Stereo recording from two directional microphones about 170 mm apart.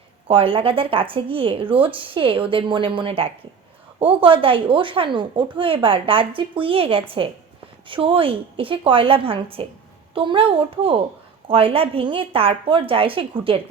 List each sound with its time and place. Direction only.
0.3 s a woman's voice: 30° right (ahead or behind)